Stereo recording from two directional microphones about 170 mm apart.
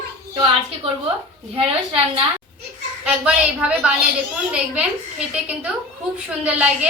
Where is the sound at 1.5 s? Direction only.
35° right (ahead or behind).